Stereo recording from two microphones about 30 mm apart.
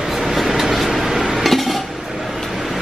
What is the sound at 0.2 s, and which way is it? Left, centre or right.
Vehicle, centre.